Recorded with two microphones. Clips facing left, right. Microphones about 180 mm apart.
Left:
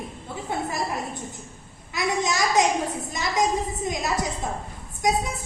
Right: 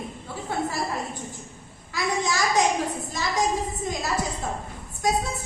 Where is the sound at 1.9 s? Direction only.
20° left (ahead or behind).